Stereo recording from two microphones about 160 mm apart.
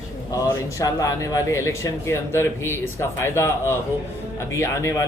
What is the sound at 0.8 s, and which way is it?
Speech, 20° left (ahead or behind).